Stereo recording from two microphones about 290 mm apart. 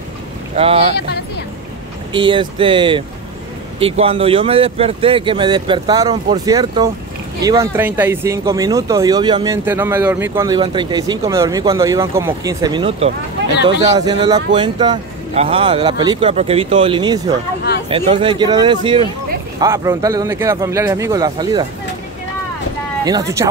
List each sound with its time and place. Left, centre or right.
0.6 s speech: centre
2.1 s speech: centre
23.0 s speech: centre